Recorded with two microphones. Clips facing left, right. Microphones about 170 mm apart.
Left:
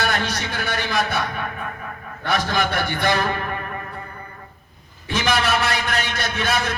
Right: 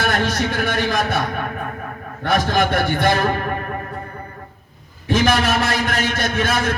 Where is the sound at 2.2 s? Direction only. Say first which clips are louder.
Right 4 dB; 45° right (ahead or behind).